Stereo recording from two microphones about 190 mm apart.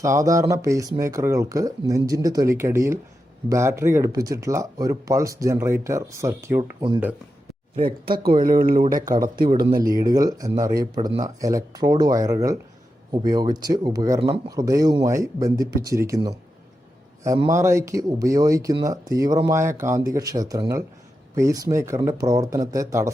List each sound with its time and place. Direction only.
0.0 s speech: 15° right (ahead or behind)
7.9 s speech: 50° right (ahead or behind)
9.0 s speech: 20° right (ahead or behind)
9.2 s speech: 45° right (ahead or behind)
10.0 s speech: 20° right (ahead or behind)